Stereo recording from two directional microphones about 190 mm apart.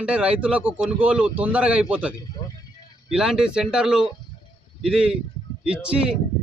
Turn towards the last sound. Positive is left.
turn(degrees=-5)  # may be behind; listen again after turning